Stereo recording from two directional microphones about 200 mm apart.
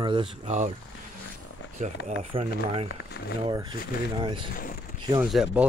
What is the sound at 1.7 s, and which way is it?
Speech, 40° right (ahead or behind).